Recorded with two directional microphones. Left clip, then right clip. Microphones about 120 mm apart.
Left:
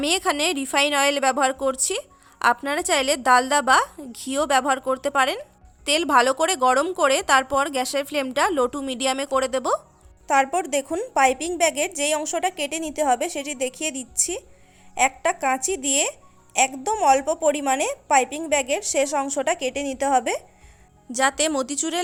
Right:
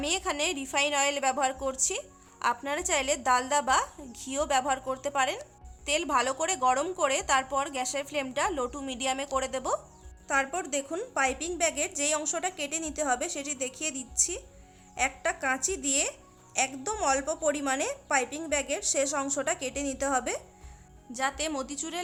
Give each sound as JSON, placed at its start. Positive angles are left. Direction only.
{"t": 0.0, "sound": "a woman's voice", "side_deg": 60}
{"t": 21.1, "sound": "speech", "side_deg": 90}